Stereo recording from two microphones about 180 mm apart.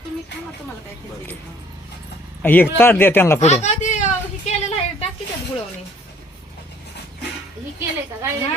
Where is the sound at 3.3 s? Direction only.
40° left (ahead or behind).